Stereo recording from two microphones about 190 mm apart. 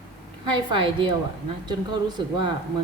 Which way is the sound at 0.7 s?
25° right (ahead or behind).